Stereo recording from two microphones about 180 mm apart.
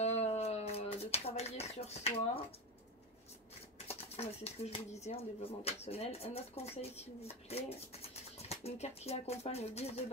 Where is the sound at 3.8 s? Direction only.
35° left (ahead or behind).